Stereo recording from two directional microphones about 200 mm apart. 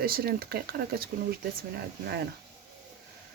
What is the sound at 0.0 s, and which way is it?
Speech, 50° right (ahead or behind).